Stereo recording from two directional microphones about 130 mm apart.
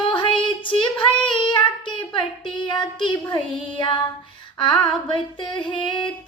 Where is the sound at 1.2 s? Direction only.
40° left (ahead or behind).